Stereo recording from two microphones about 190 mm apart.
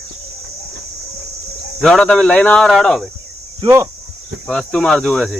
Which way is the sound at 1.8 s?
5° left (ahead or behind).